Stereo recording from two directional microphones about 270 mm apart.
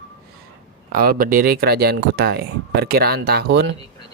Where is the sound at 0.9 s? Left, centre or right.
Right.